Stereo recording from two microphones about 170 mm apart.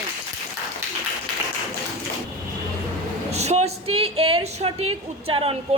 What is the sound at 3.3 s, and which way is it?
A woman's voice, 40° right (ahead or behind).